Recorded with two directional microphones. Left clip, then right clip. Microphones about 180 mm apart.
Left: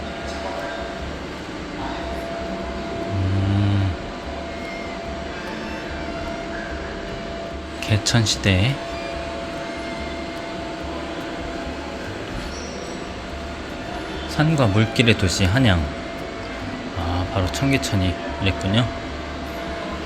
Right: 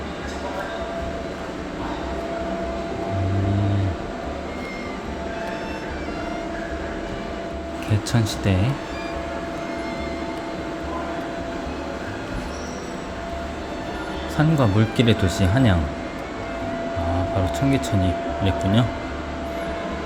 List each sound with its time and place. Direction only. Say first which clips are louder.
7.9 s speech: left 6 dB; centre (ahead or behind)
14.3 s speech: left 1 dB; 5° right (ahead or behind)
17.7 s speech: even; 10° right (ahead or behind)